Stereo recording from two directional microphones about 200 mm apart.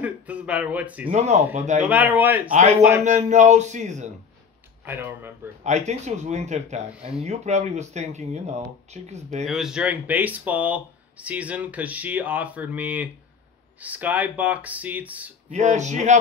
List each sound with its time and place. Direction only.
0.0 s speech: 5° right (ahead or behind)
1.1 s speech: 35° right (ahead or behind)
1.9 s speech: 10° right (ahead or behind)
3.0 s speech: 35° right (ahead or behind)
4.8 s speech: 10° right (ahead or behind)
5.6 s speech: 35° right (ahead or behind)
9.5 s speech: centre (ahead or behind)
15.5 s speech: 35° right (ahead or behind)